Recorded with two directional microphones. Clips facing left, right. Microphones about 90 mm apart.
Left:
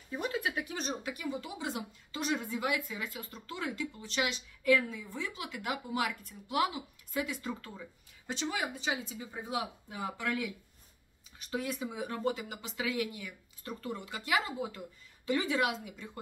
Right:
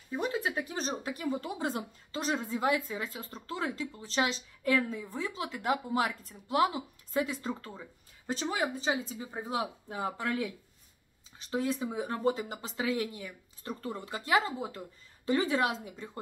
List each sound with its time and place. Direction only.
0.1 s speech: 25° right (ahead or behind)